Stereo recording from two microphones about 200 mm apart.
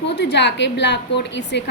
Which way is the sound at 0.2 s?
60° left (ahead or behind).